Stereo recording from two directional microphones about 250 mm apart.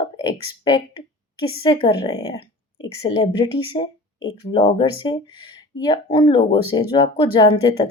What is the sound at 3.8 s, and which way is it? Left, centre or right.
Speech, left.